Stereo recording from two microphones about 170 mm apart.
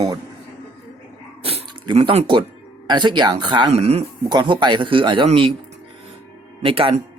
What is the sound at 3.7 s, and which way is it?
Speech, 40° right (ahead or behind).